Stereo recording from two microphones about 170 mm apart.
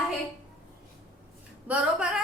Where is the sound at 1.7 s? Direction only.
10° right (ahead or behind).